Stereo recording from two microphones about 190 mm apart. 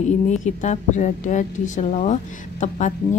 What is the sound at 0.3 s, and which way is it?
Speech, 40° left (ahead or behind).